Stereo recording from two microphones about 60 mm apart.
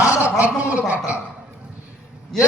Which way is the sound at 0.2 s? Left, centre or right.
Right.